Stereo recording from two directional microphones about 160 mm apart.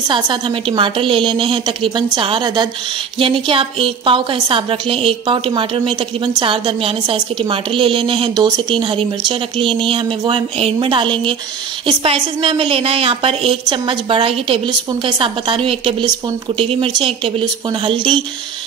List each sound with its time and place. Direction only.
0.1 s a woman's voice: 30° right (ahead or behind)